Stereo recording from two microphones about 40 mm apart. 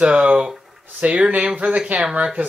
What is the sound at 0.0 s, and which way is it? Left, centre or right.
Speech, right.